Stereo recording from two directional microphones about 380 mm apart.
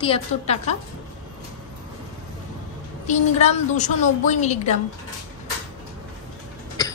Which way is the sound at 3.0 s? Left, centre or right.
Centre.